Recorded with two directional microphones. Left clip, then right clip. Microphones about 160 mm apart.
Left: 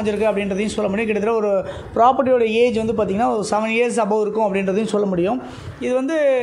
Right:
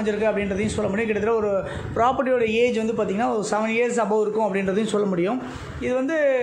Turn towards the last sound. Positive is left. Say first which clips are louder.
# left 3 dB
turn(degrees=45)  # may be behind; listen again after turning